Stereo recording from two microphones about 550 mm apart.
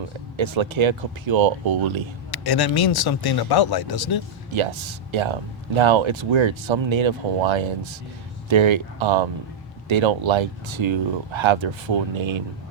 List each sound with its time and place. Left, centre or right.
0.3 s speech: right
2.3 s speech: left
4.5 s speech: right